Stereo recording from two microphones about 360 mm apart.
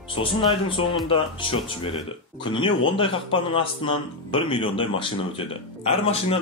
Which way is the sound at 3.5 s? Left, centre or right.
Centre.